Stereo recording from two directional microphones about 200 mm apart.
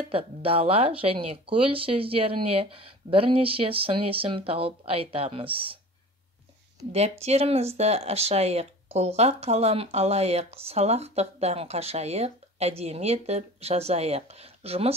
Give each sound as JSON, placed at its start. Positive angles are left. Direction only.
{"t": 0.1, "sound": "speech", "side_deg": -30}
{"t": 6.9, "sound": "speech", "side_deg": -30}